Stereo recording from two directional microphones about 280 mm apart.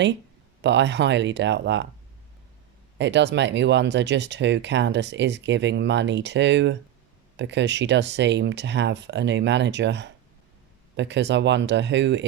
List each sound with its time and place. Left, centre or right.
0.6 s speech: right
3.0 s speech: right